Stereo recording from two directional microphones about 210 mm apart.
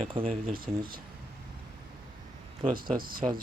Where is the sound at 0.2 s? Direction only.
45° right (ahead or behind).